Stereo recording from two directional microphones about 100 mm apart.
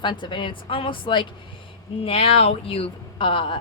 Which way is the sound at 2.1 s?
70° left (ahead or behind).